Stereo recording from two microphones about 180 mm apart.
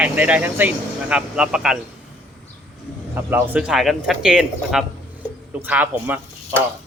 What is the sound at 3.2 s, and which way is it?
Speech, 10° right (ahead or behind).